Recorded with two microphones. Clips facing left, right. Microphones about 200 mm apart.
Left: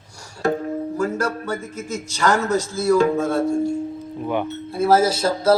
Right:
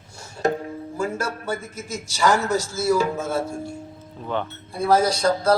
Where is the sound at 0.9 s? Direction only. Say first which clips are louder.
Left 2 dB; 25° right (ahead or behind).